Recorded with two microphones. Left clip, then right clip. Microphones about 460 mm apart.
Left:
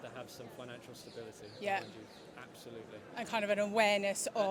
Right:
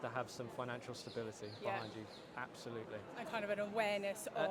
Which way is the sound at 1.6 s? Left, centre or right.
Left.